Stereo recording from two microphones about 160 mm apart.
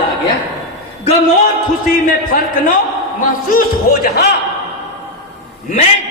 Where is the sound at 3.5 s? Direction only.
70° left (ahead or behind).